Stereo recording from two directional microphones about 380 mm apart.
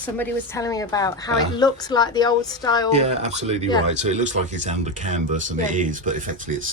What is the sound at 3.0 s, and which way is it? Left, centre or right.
Speech, centre.